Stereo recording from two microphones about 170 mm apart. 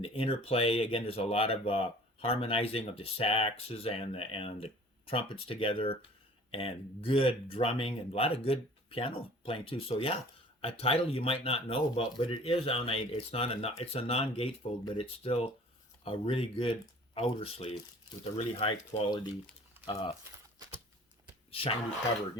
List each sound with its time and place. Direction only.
0.0 s speech: 35° left (ahead or behind)
21.5 s speech: 35° left (ahead or behind)